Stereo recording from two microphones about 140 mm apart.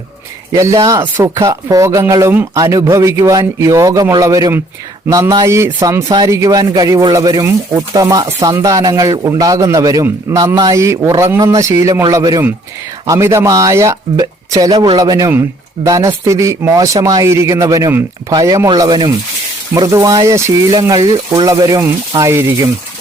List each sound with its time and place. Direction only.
0.5 s speech: 20° right (ahead or behind)